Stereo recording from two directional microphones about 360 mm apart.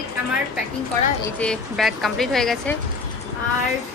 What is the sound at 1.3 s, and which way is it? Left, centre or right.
Speech, centre.